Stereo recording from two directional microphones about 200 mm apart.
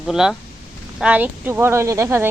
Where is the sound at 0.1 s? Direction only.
5° right (ahead or behind).